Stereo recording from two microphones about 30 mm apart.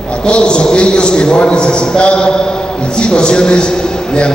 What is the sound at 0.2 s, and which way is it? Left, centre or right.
A man's voice, left.